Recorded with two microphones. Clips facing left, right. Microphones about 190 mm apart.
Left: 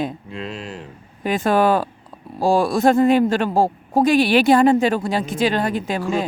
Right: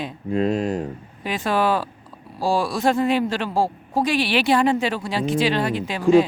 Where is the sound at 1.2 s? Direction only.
50° left (ahead or behind).